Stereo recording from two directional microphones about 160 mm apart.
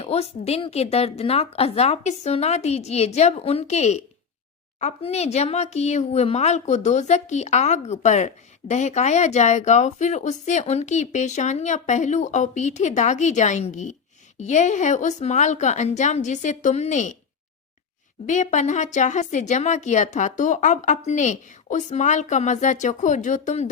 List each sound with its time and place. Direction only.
0.0 s a woman's voice: 40° left (ahead or behind)
18.3 s speech: 50° left (ahead or behind)